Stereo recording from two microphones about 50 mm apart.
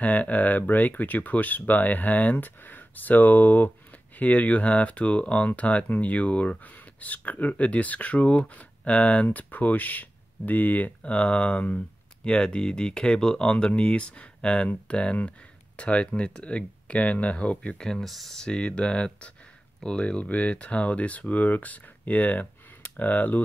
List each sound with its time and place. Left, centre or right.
0.0 s speech: left
12.3 s speech: centre
17.8 s speech: centre
18.5 s speech: centre; by 23.4 s left